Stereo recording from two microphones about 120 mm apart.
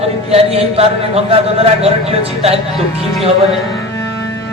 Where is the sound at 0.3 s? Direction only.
55° right (ahead or behind).